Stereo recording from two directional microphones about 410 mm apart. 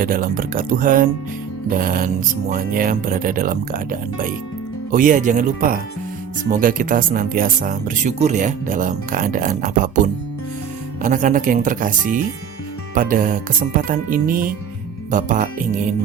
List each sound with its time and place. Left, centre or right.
0.0 s speech: right
4.9 s speech: centre